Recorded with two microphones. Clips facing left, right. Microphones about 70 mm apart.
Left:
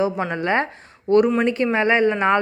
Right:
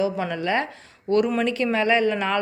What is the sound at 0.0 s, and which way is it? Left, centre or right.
Speech, left.